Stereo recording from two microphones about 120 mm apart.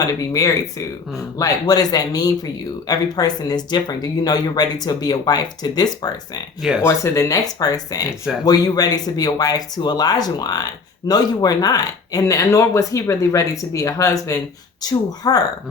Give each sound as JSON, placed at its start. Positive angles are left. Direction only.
{"t": 0.0, "sound": "speech", "side_deg": 30}
{"t": 6.6, "sound": "speech", "side_deg": -5}
{"t": 6.8, "sound": "speech", "side_deg": 25}